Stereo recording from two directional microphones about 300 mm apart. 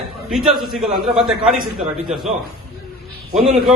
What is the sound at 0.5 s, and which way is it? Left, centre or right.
A man's voice, centre.